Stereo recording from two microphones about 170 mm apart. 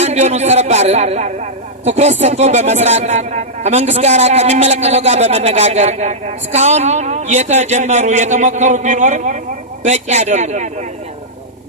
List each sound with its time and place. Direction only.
0.0 s a man's voice: 40° right (ahead or behind)